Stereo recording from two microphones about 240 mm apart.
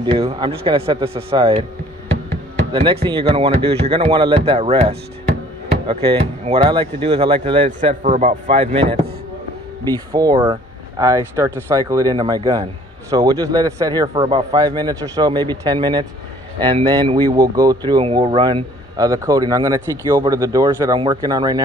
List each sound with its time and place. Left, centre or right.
0.0 s speech: right
2.7 s speech: right
8.5 s speech: right
10.1 s speech: centre